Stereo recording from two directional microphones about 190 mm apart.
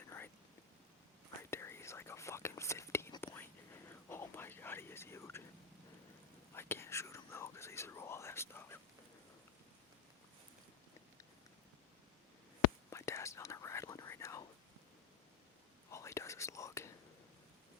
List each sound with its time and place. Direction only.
1.4 s whispering: 15° left (ahead or behind)
6.5 s whispering: 15° left (ahead or behind)
12.9 s whispering: 15° left (ahead or behind)
15.9 s whispering: 15° left (ahead or behind)